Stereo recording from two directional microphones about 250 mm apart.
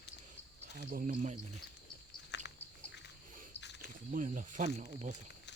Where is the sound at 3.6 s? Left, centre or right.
Left.